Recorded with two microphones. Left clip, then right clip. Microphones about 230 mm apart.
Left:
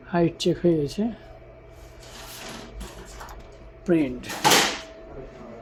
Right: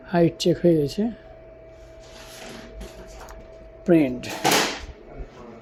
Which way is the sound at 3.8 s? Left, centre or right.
Centre.